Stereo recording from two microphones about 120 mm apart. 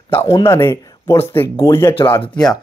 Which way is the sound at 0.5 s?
20° left (ahead or behind).